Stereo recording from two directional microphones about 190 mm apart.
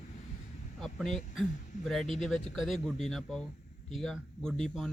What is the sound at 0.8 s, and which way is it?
Speech, centre (ahead or behind).